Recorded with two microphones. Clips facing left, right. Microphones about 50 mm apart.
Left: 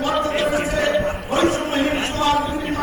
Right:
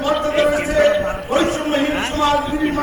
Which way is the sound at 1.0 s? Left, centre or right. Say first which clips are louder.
Right 1 dB; right.